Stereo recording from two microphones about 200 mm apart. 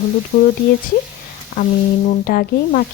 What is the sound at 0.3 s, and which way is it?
Speech, 45° left (ahead or behind).